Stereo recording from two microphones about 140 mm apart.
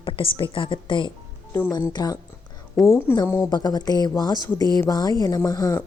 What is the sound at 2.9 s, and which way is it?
Speech, 15° left (ahead or behind).